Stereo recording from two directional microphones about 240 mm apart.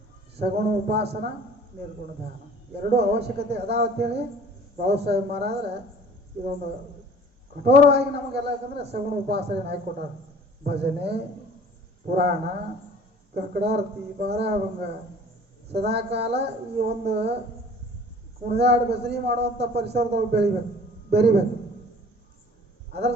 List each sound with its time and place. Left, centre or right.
0.3 s a man's voice: right
2.7 s a man's voice: right
7.6 s a man's voice: right
13.3 s a man's voice: right
18.4 s a man's voice: right
22.9 s speech: right